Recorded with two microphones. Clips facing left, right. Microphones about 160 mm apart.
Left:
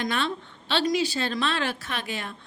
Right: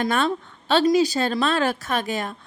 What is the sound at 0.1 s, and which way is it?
A woman's voice, 45° right (ahead or behind).